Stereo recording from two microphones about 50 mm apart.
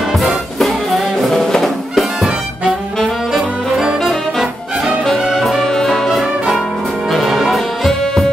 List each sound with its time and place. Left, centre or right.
0.6 s music: centre
3.3 s brass instrument: centre
4.1 s music: centre
6.0 s brass instrument: centre
7.1 s music: centre
8.0 s music: centre